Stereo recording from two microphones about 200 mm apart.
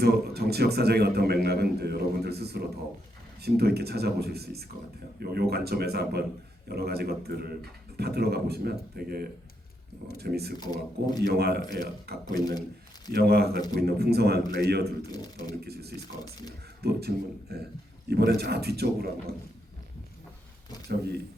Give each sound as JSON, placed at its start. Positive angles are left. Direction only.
{"t": 0.0, "sound": "a man's voice", "side_deg": -55}
{"t": 10.6, "sound": "speech", "side_deg": 20}
{"t": 11.3, "sound": "a man's voice", "side_deg": -55}
{"t": 11.6, "sound": "speech", "side_deg": 20}
{"t": 13.1, "sound": "a man's voice", "side_deg": -55}
{"t": 15.1, "sound": "speech", "side_deg": 20}
{"t": 15.6, "sound": "a man's voice", "side_deg": -55}
{"t": 16.0, "sound": "speech", "side_deg": 20}
{"t": 16.8, "sound": "a man's voice", "side_deg": -55}
{"t": 20.8, "sound": "speech", "side_deg": -55}